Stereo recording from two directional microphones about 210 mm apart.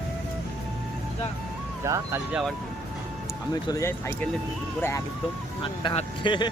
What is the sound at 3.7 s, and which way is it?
Speech, 15° left (ahead or behind).